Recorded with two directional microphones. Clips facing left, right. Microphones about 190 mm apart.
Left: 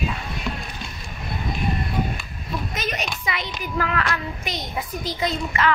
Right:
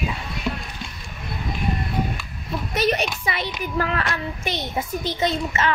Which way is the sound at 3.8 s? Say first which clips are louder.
Even; 25° right (ahead or behind).